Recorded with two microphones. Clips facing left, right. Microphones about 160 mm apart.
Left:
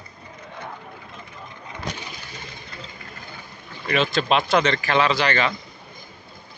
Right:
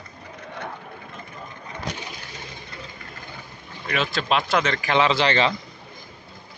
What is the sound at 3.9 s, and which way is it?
Speech, centre (ahead or behind).